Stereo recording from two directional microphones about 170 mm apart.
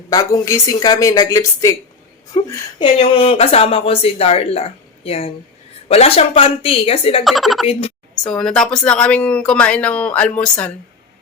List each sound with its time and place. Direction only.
0.1 s a woman's voice: 20° left (ahead or behind)
7.3 s speech: centre (ahead or behind)
7.7 s a woman's voice: 35° left (ahead or behind)
8.1 s speech: 5° left (ahead or behind)